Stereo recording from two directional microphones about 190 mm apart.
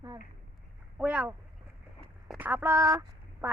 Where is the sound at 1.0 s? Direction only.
10° right (ahead or behind).